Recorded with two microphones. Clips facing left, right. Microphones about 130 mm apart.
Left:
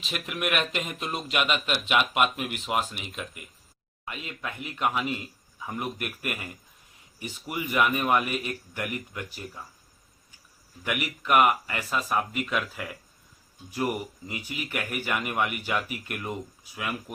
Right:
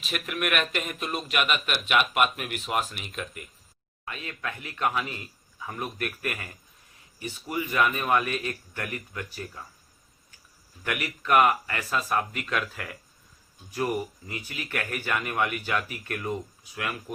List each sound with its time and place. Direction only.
0.0 s speech: 20° left (ahead or behind)
10.8 s speech: 15° left (ahead or behind)